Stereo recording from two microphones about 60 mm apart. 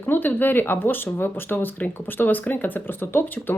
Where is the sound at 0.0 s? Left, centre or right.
Left.